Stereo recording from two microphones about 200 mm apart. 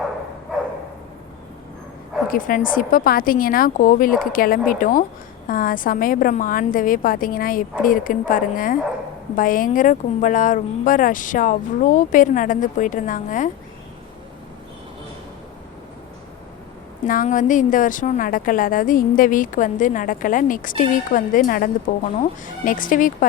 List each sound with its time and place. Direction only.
2.3 s a woman's voice: 45° left (ahead or behind)
17.1 s a woman's voice: 40° left (ahead or behind)